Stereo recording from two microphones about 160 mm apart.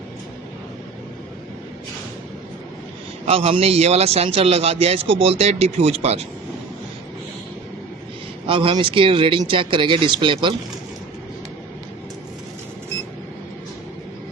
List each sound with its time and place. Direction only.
3.2 s a man's voice: 35° right (ahead or behind)
8.4 s a man's voice: 30° right (ahead or behind)